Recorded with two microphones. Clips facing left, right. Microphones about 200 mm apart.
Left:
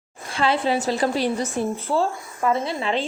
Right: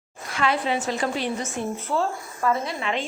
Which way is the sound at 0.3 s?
30° left (ahead or behind).